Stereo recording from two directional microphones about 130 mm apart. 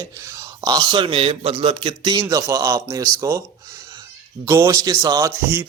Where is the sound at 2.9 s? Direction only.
20° right (ahead or behind).